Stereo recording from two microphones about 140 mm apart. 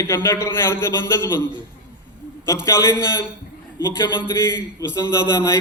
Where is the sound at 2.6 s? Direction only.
20° left (ahead or behind).